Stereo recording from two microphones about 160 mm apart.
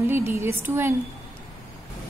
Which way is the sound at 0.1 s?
15° right (ahead or behind).